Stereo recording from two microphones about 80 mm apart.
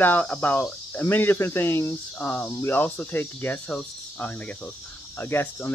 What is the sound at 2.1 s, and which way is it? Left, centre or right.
Speech, centre.